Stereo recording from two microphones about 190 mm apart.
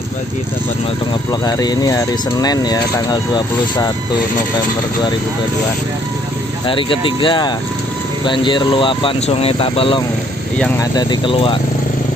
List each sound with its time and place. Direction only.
1.4 s speech: 20° left (ahead or behind)
6.7 s speech: 25° left (ahead or behind)